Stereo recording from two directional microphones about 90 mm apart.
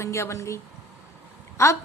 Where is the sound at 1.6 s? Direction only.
30° left (ahead or behind).